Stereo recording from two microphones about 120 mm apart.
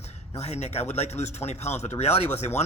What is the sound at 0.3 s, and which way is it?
Speech, 65° left (ahead or behind).